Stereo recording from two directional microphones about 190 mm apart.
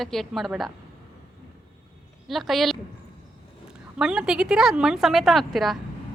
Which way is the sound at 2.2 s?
Centre (ahead or behind).